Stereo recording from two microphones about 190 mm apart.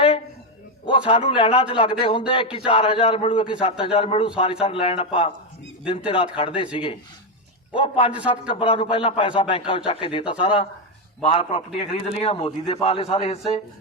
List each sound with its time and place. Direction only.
0.9 s a man's voice: 25° left (ahead or behind)
7.7 s a man's voice: 25° left (ahead or behind)